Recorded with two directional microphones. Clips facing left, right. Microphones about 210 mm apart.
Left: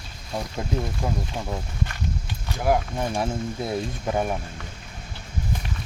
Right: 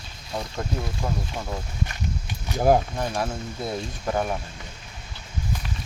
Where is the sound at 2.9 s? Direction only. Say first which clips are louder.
Left 1 dB; 20° left (ahead or behind).